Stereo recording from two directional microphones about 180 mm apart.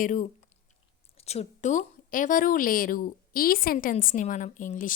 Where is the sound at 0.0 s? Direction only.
45° left (ahead or behind).